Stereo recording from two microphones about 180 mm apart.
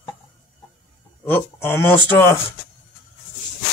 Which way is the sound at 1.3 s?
10° left (ahead or behind).